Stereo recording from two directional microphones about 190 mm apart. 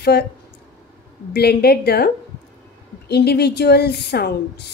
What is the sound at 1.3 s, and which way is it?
Speech, 60° left (ahead or behind).